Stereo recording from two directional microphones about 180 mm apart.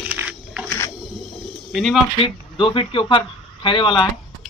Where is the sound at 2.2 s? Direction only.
30° left (ahead or behind).